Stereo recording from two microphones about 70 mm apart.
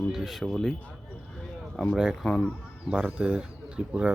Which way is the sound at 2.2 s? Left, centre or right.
Centre.